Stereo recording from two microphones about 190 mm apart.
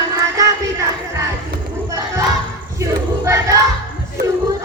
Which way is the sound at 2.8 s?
15° right (ahead or behind).